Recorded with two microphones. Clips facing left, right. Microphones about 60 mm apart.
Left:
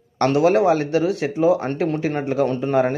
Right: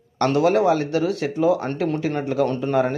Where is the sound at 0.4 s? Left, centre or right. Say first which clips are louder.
Left 2 dB; left.